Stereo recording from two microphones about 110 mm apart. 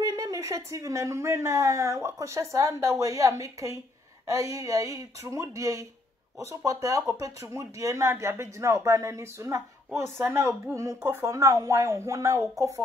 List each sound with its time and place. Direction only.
0.0 s speech: 30° right (ahead or behind)